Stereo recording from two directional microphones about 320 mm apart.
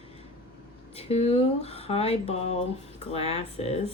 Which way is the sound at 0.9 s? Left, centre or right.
Centre.